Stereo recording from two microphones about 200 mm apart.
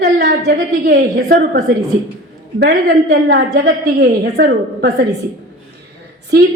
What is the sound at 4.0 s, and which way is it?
Speech, 55° right (ahead or behind).